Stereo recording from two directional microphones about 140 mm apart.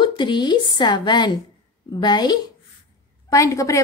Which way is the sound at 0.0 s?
35° left (ahead or behind).